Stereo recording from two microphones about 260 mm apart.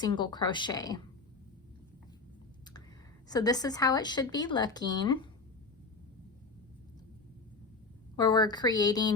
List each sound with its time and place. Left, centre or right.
0.0 s speech: centre
3.2 s speech: centre
8.1 s speech: centre